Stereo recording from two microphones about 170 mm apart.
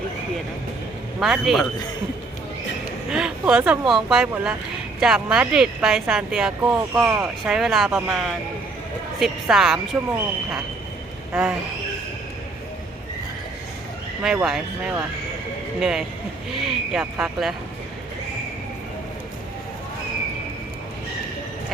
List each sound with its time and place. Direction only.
1.2 s speech: centre (ahead or behind)
3.1 s speech: 5° right (ahead or behind)
11.3 s speech: 5° right (ahead or behind)
14.2 s speech: 5° right (ahead or behind)